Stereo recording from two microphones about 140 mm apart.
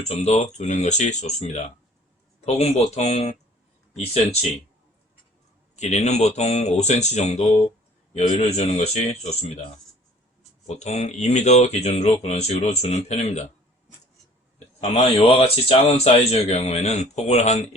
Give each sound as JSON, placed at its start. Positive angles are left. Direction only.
{"t": 0.1, "sound": "speech", "side_deg": 50}
{"t": 5.7, "sound": "speech", "side_deg": 55}
{"t": 10.7, "sound": "speech", "side_deg": 55}
{"t": 14.8, "sound": "speech", "side_deg": 45}